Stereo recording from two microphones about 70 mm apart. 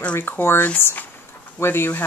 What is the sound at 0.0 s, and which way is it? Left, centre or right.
Speech, left.